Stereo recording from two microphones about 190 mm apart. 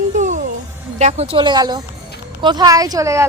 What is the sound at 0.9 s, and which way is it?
Speech, 35° right (ahead or behind).